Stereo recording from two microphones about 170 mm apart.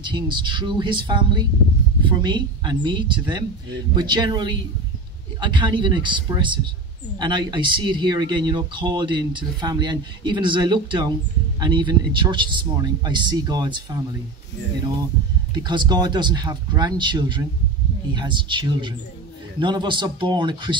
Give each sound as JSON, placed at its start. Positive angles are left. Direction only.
{"t": 0.1, "sound": "speech", "side_deg": -25}
{"t": 15.5, "sound": "speech", "side_deg": -25}